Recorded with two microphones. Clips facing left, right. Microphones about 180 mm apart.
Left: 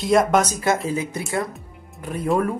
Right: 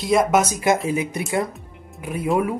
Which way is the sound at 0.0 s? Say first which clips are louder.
Even; centre (ahead or behind).